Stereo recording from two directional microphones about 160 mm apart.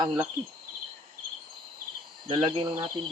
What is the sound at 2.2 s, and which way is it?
Speech, 30° right (ahead or behind).